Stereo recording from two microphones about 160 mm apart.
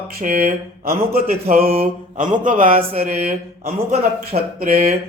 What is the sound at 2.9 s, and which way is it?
Mantra, 40° right (ahead or behind).